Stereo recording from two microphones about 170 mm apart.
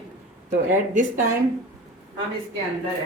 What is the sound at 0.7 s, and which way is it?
Speech, 50° right (ahead or behind).